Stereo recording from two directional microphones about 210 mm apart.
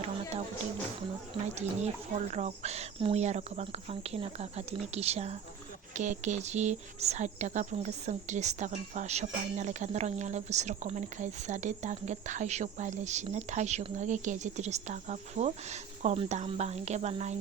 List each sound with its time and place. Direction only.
0.0 s music: 30° right (ahead or behind)
1.5 s speech: 30° right (ahead or behind)